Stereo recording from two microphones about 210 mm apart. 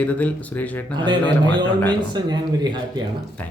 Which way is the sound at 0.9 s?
20° right (ahead or behind).